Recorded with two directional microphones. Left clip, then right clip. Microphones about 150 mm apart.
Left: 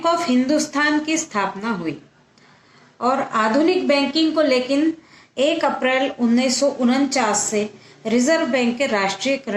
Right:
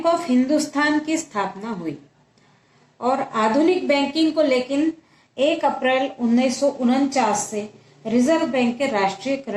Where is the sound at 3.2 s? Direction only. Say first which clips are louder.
Even; 20° left (ahead or behind).